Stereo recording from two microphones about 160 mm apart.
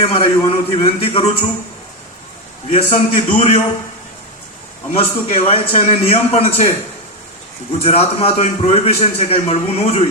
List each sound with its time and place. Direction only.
0.0 s a man's voice: 35° left (ahead or behind)
2.6 s a man's voice: 45° left (ahead or behind)
4.9 s a man's voice: 40° left (ahead or behind)
7.8 s a man's voice: 40° left (ahead or behind)